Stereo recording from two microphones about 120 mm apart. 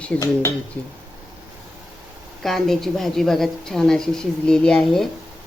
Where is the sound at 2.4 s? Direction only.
5° left (ahead or behind).